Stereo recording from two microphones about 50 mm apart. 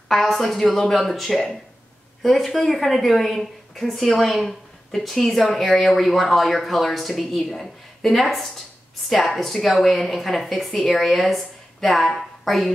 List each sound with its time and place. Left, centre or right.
0.1 s a woman's voice: centre